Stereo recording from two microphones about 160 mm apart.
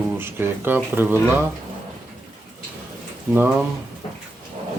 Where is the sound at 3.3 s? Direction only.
15° right (ahead or behind).